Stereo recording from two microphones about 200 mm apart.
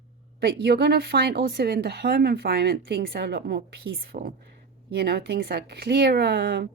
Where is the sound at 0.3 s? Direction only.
55° right (ahead or behind).